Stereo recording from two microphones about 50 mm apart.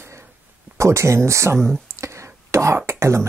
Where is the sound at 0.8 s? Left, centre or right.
Right.